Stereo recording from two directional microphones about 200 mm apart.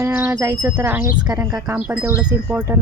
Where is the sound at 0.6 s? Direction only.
10° right (ahead or behind).